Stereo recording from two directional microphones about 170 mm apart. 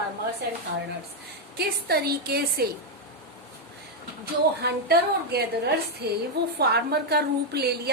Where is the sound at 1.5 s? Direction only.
65° right (ahead or behind).